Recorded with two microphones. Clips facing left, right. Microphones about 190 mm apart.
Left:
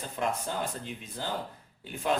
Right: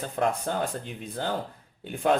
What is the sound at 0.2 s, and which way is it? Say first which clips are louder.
A man's voice: right 5 dB; 60° right (ahead or behind).